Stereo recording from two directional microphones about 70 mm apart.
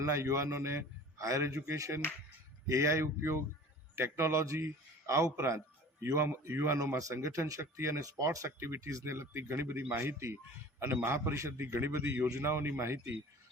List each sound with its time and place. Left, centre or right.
0.0 s a man's voice: right
8.5 s a man's voice: right
8.8 s a man's voice: right